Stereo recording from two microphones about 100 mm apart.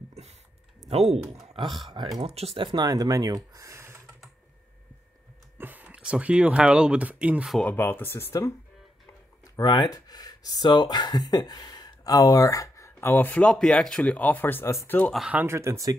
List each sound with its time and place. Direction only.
0.1 s a sound: 90° right
1.6 s speech: centre (ahead or behind)
2.2 s speech: 85° right; by 4.0 s 25° right (ahead or behind)
5.6 s speech: 15° right (ahead or behind)
7.6 s speech: 20° left (ahead or behind)
9.0 s a sound: 45° left (ahead or behind)
9.9 s speech: 40° left (ahead or behind)
15.3 s speech: 25° right (ahead or behind)